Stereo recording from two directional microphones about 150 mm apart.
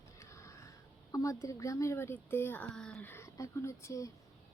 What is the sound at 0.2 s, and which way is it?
Crow, 20° left (ahead or behind).